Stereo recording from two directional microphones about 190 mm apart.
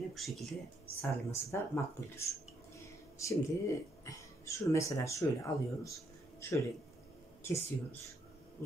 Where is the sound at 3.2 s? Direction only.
15° left (ahead or behind).